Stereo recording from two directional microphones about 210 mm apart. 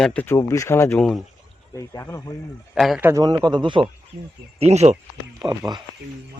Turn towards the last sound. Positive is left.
turn(degrees=-20)  # may be behind; listen again after turning